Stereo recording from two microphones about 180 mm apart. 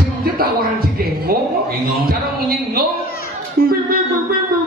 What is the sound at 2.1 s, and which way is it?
Speech, 55° right (ahead or behind).